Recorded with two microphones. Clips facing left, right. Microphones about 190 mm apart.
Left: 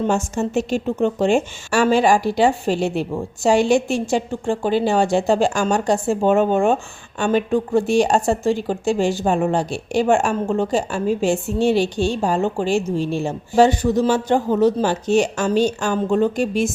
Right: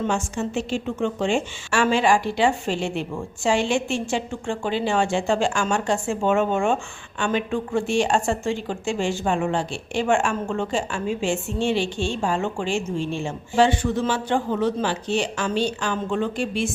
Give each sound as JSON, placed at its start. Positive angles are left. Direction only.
{"t": 0.1, "sound": "speech", "side_deg": 40}